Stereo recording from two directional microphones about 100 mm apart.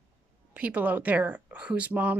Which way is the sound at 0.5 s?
15° right (ahead or behind).